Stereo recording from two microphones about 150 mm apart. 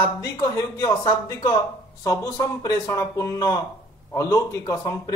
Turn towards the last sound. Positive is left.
turn(degrees=25)  # may be behind; listen again after turning